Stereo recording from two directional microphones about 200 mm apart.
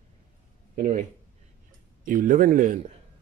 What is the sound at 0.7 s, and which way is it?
Speech, 40° right (ahead or behind).